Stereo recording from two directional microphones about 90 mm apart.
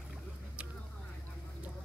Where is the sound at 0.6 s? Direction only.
15° right (ahead or behind).